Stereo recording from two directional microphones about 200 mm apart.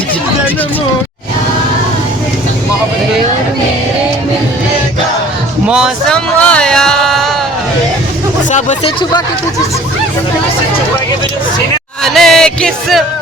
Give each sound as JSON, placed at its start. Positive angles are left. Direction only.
{"t": 5.6, "sound": "music", "side_deg": -5}
{"t": 8.4, "sound": "a sound", "side_deg": 35}
{"t": 12.0, "sound": "music", "side_deg": 0}